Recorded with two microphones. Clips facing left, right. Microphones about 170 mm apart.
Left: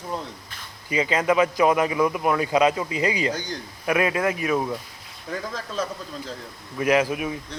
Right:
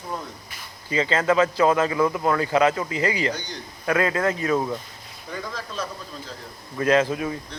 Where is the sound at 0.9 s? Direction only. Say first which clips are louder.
Even; 15° left (ahead or behind).